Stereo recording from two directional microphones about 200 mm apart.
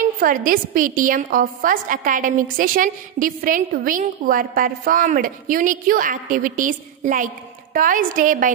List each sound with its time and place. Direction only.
0.2 s a woman's voice: 45° right (ahead or behind)